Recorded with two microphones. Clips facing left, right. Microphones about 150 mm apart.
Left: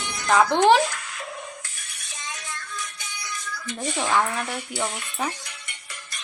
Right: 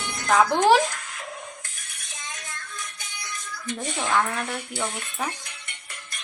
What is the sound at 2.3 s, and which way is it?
Music, 50° right (ahead or behind).